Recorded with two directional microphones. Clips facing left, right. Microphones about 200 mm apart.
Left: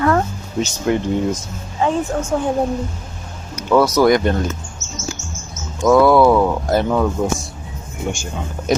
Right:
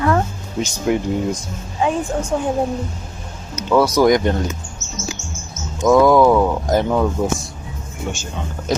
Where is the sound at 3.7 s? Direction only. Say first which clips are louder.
Left 1 dB; 10° right (ahead or behind).